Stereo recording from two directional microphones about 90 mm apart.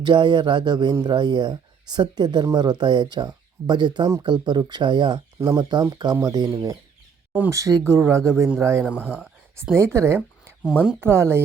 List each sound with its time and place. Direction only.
0.0 s speech: 60° right (ahead or behind)
5.4 s speech: 30° right (ahead or behind)
5.9 s speech: 55° right (ahead or behind)
6.1 s speech: 40° right (ahead or behind)
8.8 s speech: 15° right (ahead or behind)
9.7 s speech: 30° right (ahead or behind)
10.2 s a sound: 10° right (ahead or behind)
11.0 s speech: 30° right (ahead or behind)